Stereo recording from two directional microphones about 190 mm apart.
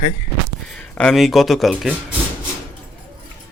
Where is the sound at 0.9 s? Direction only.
Centre (ahead or behind).